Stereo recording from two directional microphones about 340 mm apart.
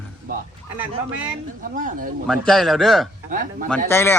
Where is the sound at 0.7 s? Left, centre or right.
Centre.